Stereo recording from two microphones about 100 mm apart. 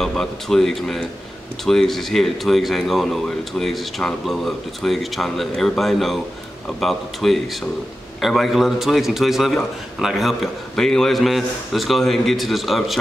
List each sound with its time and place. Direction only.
0.0 s a man's voice: 5° left (ahead or behind)